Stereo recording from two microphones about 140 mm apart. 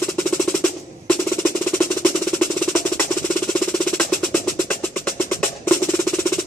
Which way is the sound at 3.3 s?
5° left (ahead or behind).